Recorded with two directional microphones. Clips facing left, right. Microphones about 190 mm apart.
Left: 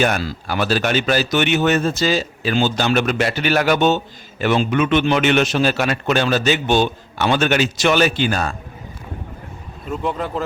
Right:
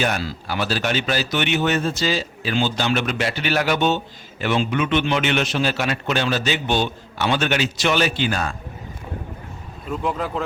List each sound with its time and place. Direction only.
0.0 s a man's voice: 50° left (ahead or behind)
9.8 s speech: centre (ahead or behind)